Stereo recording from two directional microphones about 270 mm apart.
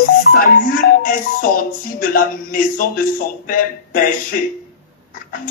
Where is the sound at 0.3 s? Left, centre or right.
Left.